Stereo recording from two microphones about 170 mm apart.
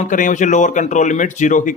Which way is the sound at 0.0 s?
50° left (ahead or behind).